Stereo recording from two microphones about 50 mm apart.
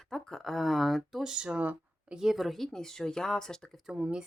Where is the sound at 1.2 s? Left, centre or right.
Centre.